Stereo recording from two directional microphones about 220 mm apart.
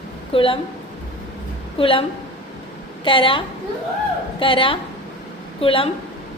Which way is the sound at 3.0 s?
25° left (ahead or behind).